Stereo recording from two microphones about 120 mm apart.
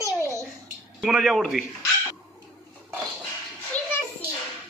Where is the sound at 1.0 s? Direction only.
Centre (ahead or behind).